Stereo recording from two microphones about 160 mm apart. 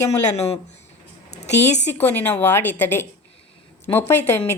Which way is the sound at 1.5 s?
90° left.